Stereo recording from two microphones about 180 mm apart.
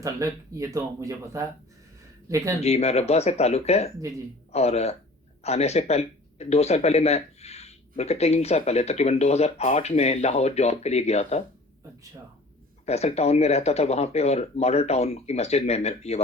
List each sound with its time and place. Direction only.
0.0 s speech: 15° right (ahead or behind)
2.6 s speech: 35° left (ahead or behind)
12.8 s speech: 35° left (ahead or behind)